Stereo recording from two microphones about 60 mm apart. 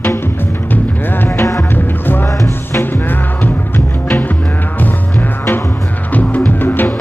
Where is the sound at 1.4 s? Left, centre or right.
Left.